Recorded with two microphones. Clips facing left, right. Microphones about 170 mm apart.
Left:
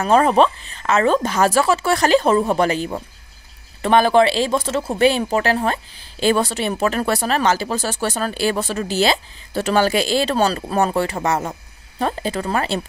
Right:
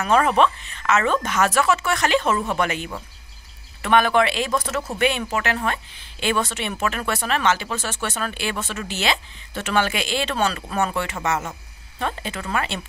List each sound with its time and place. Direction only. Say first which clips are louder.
0.0 s speech: left 4 dB; 35° left (ahead or behind)